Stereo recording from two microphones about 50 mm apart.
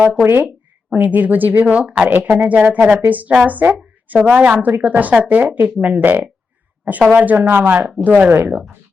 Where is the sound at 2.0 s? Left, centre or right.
Right.